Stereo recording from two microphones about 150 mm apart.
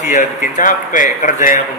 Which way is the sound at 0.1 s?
60° left (ahead or behind).